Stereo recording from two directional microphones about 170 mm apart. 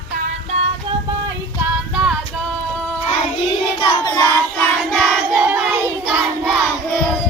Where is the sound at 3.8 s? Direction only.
25° left (ahead or behind).